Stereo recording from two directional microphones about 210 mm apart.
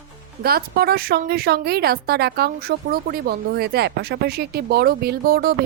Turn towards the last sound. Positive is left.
turn(degrees=-45)  # may be behind; listen again after turning